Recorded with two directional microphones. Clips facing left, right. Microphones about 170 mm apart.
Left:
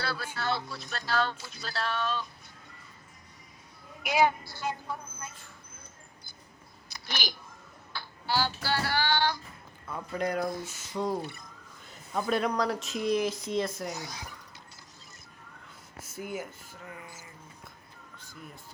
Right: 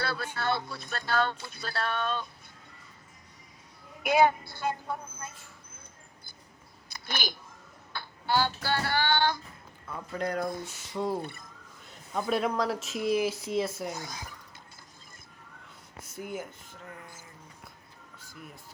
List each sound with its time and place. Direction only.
0.0 s a sound: 55° right (ahead or behind)
0.3 s speech: 55° right (ahead or behind)
4.0 s speech: 55° right (ahead or behind)
6.9 s a sound: 50° right (ahead or behind)
7.9 s female singing: 55° right (ahead or behind)
10.1 s speech: 10° left (ahead or behind)
10.7 s speech: centre (ahead or behind)
13.8 s speech: 50° right (ahead or behind)
15.6 s speech: 5° left (ahead or behind)